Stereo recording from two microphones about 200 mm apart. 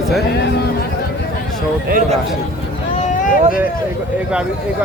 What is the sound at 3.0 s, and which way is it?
Boat, 40° left (ahead or behind).